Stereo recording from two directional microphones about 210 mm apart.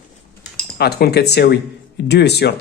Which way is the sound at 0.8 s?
50° left (ahead or behind).